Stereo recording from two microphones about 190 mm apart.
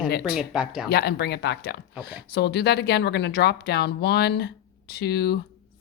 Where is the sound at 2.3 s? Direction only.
60° left (ahead or behind).